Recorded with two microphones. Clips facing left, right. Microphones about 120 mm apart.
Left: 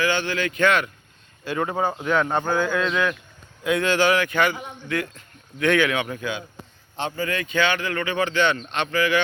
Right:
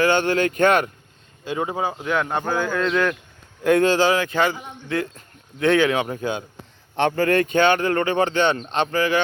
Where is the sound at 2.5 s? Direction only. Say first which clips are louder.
Even; 35° right (ahead or behind).